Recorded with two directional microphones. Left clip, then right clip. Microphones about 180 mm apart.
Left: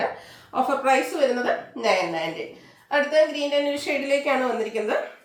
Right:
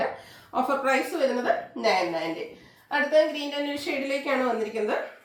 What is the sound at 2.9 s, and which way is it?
A woman's voice, 15° left (ahead or behind).